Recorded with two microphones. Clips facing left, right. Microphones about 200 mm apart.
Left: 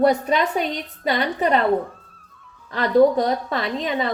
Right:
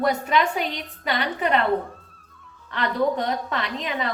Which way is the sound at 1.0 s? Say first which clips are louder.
Left 4 dB; 35° left (ahead or behind).